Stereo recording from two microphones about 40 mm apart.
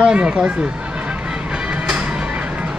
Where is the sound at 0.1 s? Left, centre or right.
Right.